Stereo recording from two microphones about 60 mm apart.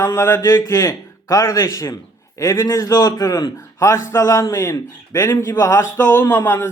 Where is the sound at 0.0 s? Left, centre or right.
Left.